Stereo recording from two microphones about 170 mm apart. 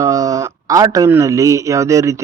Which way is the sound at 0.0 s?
20° right (ahead or behind).